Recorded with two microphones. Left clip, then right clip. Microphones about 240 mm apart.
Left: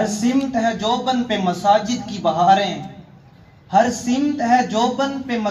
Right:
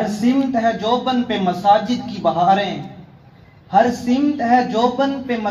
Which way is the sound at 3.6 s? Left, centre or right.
Left.